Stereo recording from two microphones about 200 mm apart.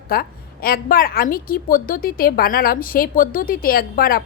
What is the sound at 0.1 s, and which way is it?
A woman's voice, 50° left (ahead or behind).